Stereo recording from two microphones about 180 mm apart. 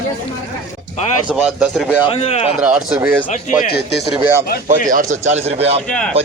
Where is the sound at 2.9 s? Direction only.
15° right (ahead or behind).